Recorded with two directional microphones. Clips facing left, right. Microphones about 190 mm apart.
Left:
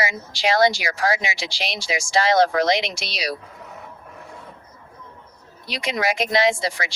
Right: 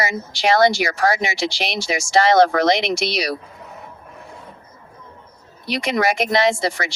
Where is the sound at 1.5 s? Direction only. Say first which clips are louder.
Right 3 dB; 65° right (ahead or behind).